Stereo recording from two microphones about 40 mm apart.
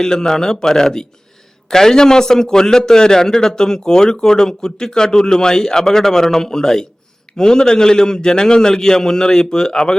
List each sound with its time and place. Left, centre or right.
0.0 s a man's voice: centre